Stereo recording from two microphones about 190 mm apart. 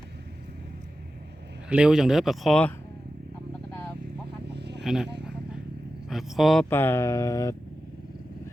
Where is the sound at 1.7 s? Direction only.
5° right (ahead or behind).